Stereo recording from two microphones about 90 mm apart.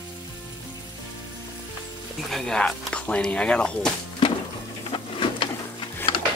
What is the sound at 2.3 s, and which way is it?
Speech, 10° left (ahead or behind).